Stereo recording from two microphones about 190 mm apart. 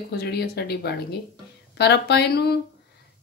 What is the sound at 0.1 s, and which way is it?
Speech, 55° left (ahead or behind).